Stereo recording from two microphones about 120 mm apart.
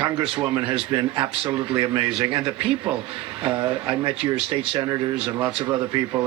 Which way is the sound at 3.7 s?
45° right (ahead or behind).